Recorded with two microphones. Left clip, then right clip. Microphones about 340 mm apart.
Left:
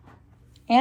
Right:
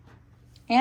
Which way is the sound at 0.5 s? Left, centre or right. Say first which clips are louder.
Left 3 dB; left.